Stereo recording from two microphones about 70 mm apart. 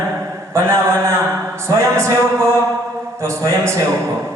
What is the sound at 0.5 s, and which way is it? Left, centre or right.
Speech, right.